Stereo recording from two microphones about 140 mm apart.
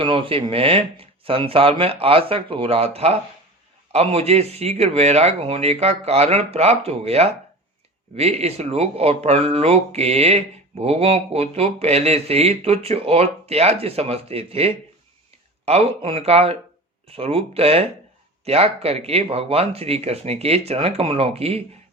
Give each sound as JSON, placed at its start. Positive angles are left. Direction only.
{"t": 0.0, "sound": "speech", "side_deg": -40}